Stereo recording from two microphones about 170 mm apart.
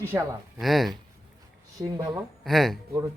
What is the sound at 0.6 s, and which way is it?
Speech, centre (ahead or behind).